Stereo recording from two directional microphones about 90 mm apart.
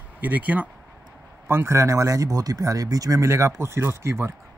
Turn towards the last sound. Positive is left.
turn(degrees=-30)  # may be behind; listen again after turning